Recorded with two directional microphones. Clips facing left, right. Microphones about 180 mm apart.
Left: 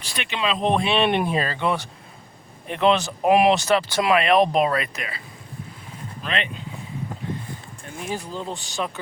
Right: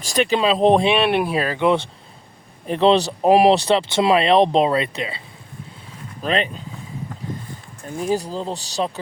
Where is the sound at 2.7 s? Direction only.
35° right (ahead or behind).